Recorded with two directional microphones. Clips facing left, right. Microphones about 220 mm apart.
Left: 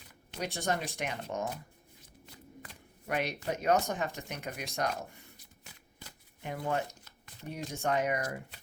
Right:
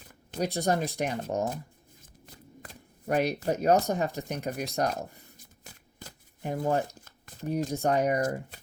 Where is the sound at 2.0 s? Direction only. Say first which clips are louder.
Right 1 dB; 45° right (ahead or behind).